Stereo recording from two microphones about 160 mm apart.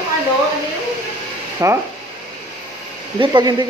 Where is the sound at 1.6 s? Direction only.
20° right (ahead or behind).